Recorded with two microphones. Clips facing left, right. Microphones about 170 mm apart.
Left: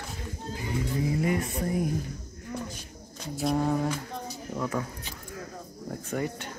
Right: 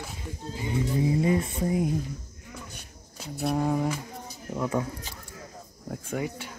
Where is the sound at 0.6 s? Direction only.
25° right (ahead or behind).